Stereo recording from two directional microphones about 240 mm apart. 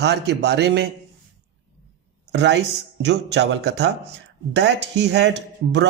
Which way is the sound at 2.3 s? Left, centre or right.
Right.